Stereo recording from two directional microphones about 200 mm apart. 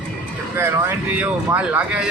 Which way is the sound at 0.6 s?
10° right (ahead or behind).